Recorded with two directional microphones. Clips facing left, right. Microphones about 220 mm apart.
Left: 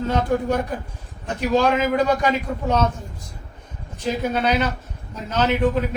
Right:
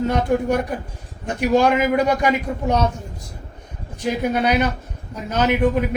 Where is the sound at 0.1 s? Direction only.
15° right (ahead or behind).